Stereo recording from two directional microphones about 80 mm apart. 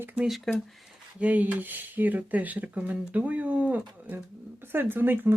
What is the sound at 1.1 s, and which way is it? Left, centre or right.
Speech, centre.